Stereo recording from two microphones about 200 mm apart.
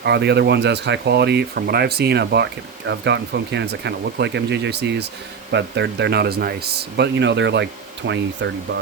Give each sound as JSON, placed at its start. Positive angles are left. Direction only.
{"t": 0.0, "sound": "speech", "side_deg": -55}